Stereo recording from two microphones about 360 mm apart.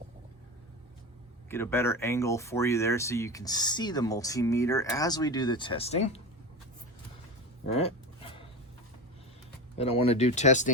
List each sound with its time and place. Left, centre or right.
1.5 s speech: centre
7.8 s a sound: centre
9.7 s speech: centre